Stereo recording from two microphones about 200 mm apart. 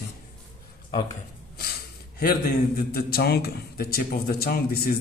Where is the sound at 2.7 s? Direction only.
50° left (ahead or behind).